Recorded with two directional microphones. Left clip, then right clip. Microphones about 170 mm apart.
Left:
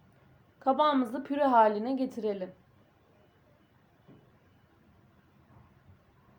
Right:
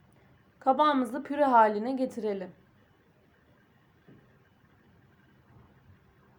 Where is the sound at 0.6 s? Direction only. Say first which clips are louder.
Right 2 dB; 40° right (ahead or behind).